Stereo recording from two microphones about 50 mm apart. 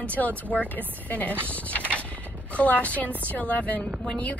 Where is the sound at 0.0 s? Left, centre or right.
Left.